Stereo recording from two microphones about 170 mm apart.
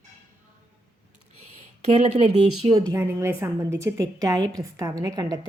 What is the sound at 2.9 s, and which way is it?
A woman's voice, 15° right (ahead or behind).